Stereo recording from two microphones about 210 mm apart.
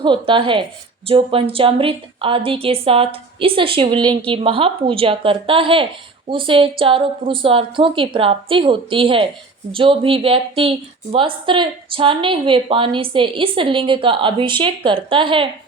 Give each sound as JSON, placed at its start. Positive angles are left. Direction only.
{"t": 0.0, "sound": "speech", "side_deg": -25}